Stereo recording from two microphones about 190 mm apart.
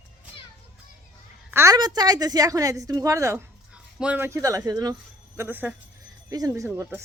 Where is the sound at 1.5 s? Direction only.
15° right (ahead or behind).